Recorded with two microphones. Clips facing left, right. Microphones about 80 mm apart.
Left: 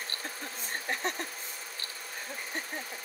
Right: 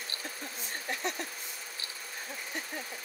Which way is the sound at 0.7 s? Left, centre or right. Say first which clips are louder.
Left 2 dB; left.